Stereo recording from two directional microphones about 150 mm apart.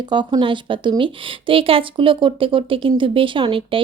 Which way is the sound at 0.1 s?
30° right (ahead or behind).